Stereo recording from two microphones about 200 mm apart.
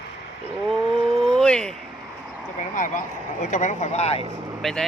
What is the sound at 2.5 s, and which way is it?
Speech, 40° left (ahead or behind).